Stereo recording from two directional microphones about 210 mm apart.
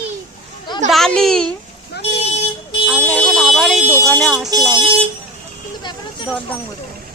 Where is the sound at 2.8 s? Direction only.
Centre (ahead or behind).